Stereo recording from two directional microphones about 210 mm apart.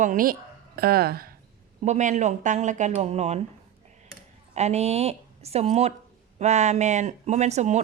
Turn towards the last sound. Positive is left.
turn(degrees=-30)  # may be behind; listen again after turning